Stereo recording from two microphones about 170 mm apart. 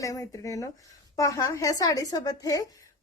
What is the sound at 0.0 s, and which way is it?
A woman's voice, 20° left (ahead or behind).